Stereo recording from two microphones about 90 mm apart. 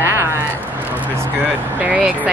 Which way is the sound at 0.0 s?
30° right (ahead or behind).